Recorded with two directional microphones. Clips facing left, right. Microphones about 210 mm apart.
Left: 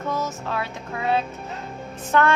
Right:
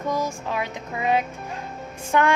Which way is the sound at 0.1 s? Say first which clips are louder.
Right 1 dB; 15° right (ahead or behind).